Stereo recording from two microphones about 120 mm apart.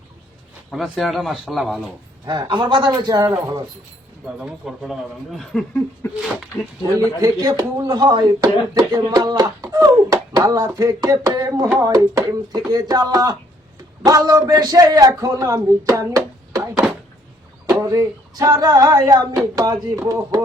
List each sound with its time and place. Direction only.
0.7 s speech: centre (ahead or behind)
2.2 s a man's voice: 40° right (ahead or behind)
4.4 s speech: 5° right (ahead or behind)
6.8 s a man's voice: 30° right (ahead or behind)